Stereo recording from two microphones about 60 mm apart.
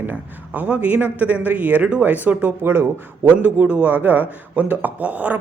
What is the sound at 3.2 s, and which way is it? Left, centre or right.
A man's voice, right.